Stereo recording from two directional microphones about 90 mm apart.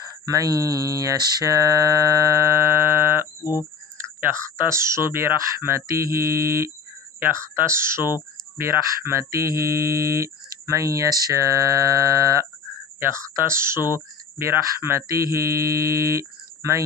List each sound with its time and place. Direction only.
0.3 s speech: 40° right (ahead or behind)
3.4 s speech: 45° left (ahead or behind)
3.9 s speech: 25° right (ahead or behind)